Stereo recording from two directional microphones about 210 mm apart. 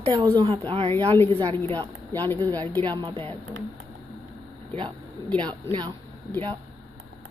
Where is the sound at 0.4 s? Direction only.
20° right (ahead or behind).